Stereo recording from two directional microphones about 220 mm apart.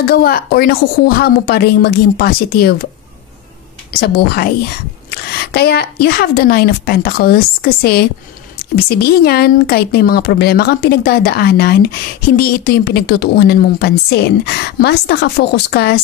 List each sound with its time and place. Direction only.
0.0 s a woman's voice: 45° left (ahead or behind)
4.0 s a woman's voice: 45° left (ahead or behind)